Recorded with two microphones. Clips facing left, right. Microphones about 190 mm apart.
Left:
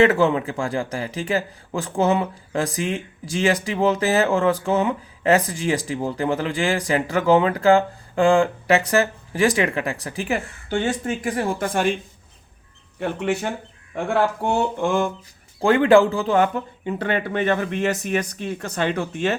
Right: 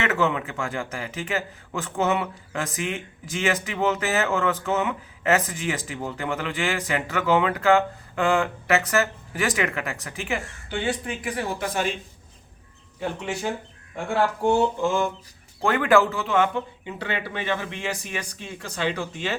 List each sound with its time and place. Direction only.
0.0 s speech: 30° left (ahead or behind); by 11.9 s 50° left (ahead or behind)
13.0 s speech: 60° left (ahead or behind)
15.6 s a man's voice: 30° left (ahead or behind); by 18.3 s 50° left (ahead or behind)
18.3 s a man's voice: 60° left (ahead or behind)